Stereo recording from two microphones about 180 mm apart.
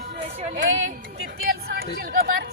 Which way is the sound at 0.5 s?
90° right.